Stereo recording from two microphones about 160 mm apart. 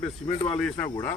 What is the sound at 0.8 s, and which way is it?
Speech, 20° left (ahead or behind).